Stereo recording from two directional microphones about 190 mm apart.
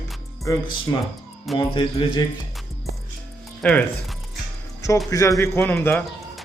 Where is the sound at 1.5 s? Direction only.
30° left (ahead or behind).